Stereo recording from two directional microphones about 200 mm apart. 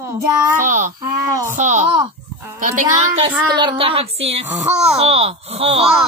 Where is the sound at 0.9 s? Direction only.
15° right (ahead or behind).